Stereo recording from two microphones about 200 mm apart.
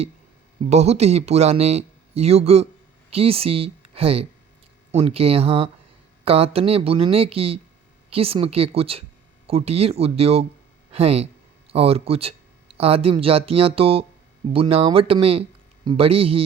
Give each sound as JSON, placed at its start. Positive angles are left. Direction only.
{"t": 0.6, "sound": "speech", "side_deg": -30}